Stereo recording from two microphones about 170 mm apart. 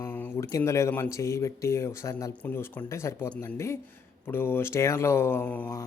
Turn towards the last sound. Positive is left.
turn(degrees=10)  # may be behind; listen again after turning